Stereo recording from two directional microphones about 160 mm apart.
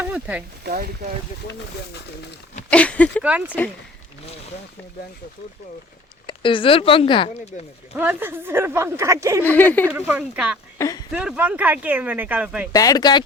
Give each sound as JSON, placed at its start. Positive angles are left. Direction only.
{"t": 0.0, "sound": "speech", "side_deg": -10}
{"t": 0.6, "sound": "speech", "side_deg": -70}
{"t": 2.6, "sound": "speech", "side_deg": 10}
{"t": 3.2, "sound": "speech", "side_deg": -10}
{"t": 6.2, "sound": "speech", "side_deg": 30}
{"t": 7.9, "sound": "speech", "side_deg": -15}
{"t": 9.4, "sound": "speech", "side_deg": 10}
{"t": 9.9, "sound": "speech", "side_deg": -10}
{"t": 10.8, "sound": "speech", "side_deg": 20}
{"t": 11.1, "sound": "speech", "side_deg": -5}
{"t": 12.7, "sound": "speech", "side_deg": 25}